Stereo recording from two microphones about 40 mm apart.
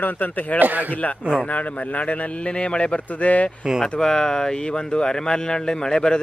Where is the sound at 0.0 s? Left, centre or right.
Left.